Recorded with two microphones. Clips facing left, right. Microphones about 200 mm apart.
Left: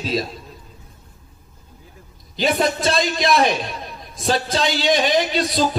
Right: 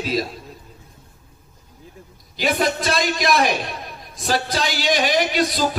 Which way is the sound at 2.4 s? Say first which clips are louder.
Left 2 dB; 25° left (ahead or behind).